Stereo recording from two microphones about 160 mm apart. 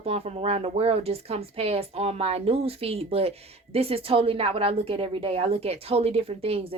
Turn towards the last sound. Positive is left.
turn(degrees=-35)  # may be behind; listen again after turning